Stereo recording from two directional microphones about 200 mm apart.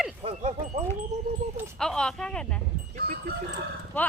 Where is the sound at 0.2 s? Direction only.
30° right (ahead or behind).